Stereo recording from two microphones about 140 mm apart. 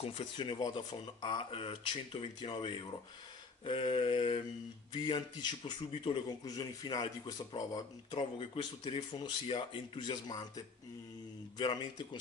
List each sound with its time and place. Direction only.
0.0 s a man's voice: 40° left (ahead or behind)